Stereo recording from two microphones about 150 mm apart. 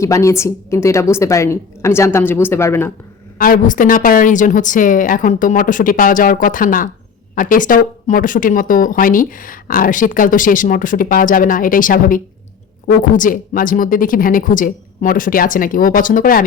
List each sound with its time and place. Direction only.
0.0 s a woman's voice: 20° left (ahead or behind)
3.3 s a woman's voice: 70° left (ahead or behind)